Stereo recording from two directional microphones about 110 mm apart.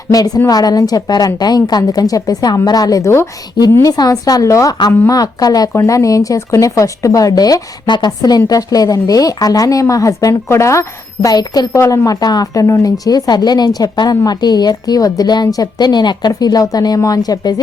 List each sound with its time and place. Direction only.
0.1 s a woman's voice: 30° left (ahead or behind)
3.9 s speech: 35° left (ahead or behind)